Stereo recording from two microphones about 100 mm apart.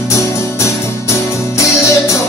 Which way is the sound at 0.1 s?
30° left (ahead or behind).